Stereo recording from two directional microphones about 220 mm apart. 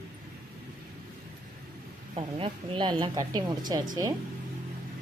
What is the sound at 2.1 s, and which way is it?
Speech, 20° right (ahead or behind).